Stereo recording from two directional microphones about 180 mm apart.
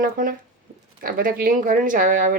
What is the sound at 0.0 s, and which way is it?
A woman's voice, 50° right (ahead or behind).